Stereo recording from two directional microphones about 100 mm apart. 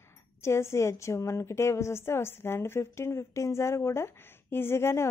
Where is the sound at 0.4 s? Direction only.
25° left (ahead or behind).